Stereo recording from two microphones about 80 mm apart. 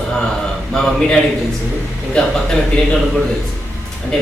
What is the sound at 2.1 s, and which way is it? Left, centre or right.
Speech, centre.